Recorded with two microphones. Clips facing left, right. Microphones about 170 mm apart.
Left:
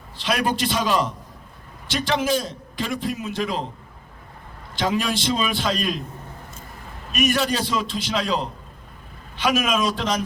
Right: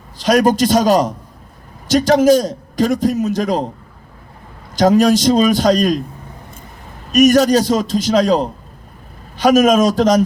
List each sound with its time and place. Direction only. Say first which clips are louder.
0.2 s a man's voice: right 10 dB; 40° right (ahead or behind)
4.7 s a man's voice: right 12 dB; 40° right (ahead or behind)
7.1 s a man's voice: right 12 dB; 40° right (ahead or behind)